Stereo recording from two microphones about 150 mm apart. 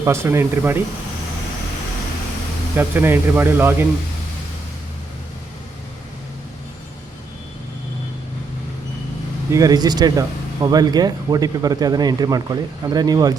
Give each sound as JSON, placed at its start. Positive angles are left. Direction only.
{"t": 0.0, "sound": "speech", "side_deg": -15}
{"t": 2.7, "sound": "speech", "side_deg": -15}
{"t": 9.5, "sound": "speech", "side_deg": -25}